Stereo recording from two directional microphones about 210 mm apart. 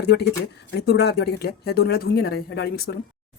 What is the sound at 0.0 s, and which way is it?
A woman's voice, 50° left (ahead or behind).